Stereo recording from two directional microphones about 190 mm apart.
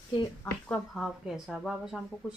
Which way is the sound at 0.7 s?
Centre (ahead or behind).